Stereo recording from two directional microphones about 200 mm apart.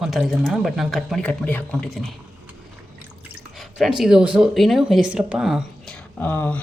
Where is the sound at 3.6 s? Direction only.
Centre (ahead or behind).